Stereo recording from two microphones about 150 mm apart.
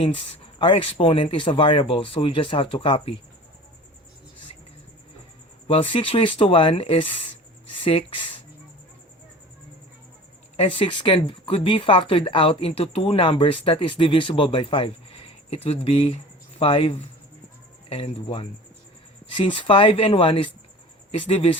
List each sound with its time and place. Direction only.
0.6 s speech: 35° left (ahead or behind)
5.6 s speech: 40° left (ahead or behind)
10.6 s speech: 35° left (ahead or behind)
19.5 s speech: 35° left (ahead or behind)